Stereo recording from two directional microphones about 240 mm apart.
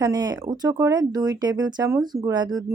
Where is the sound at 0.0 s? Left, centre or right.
Centre.